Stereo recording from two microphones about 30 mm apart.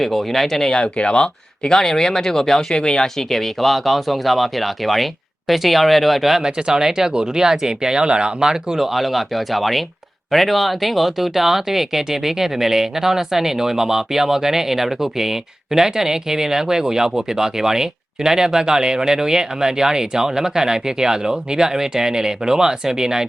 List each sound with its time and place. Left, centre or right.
0.0 s speech: centre
0.7 s speech: left; by 2.7 s centre
2.7 s speech: left
3.2 s speech: centre
6.4 s speech: right
8.8 s speech: centre; by 23.2 s right